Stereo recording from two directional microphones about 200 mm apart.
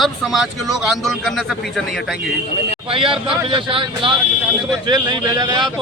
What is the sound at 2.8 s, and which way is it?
Speech, 25° right (ahead or behind).